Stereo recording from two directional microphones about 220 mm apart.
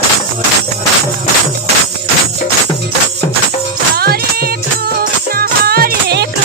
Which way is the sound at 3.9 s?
45° right (ahead or behind).